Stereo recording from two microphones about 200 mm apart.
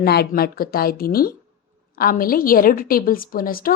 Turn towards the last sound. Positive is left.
turn(degrees=45)  # may be behind; listen again after turning